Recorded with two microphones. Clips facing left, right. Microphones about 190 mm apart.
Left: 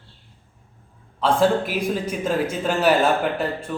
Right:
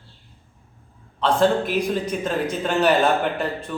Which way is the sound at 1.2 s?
10° left (ahead or behind).